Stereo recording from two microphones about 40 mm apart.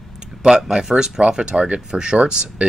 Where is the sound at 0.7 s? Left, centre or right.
Centre.